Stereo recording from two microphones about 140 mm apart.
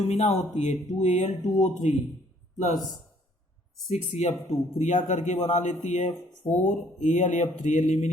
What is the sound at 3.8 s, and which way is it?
A man's voice, 50° left (ahead or behind).